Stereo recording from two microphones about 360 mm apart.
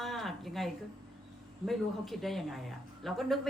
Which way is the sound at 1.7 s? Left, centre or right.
Centre.